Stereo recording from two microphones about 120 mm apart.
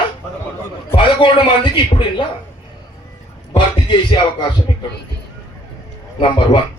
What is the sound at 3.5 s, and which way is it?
Speech, 40° left (ahead or behind).